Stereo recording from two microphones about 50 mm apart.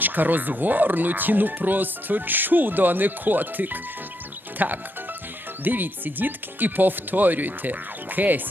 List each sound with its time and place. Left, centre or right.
0.0 s speech: right